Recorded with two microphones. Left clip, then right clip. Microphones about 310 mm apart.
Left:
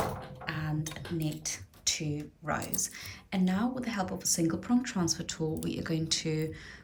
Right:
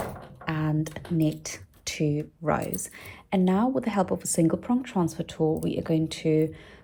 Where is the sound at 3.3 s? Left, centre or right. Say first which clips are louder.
Right 8 dB; centre.